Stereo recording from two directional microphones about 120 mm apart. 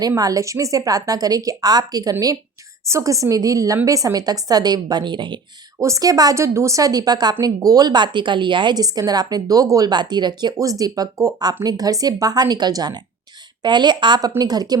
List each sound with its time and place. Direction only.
0.2 s a woman's voice: 30° right (ahead or behind)
5.8 s a woman's voice: 30° right (ahead or behind)